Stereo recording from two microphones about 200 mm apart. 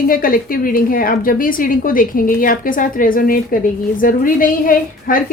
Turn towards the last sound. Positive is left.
turn(degrees=45)  # may be behind; listen again after turning